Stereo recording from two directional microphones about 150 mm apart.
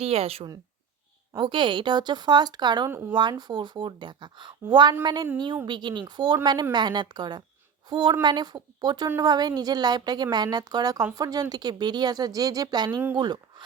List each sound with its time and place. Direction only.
0.0 s a woman's voice: 40° right (ahead or behind)
1.3 s a woman's voice: 30° right (ahead or behind)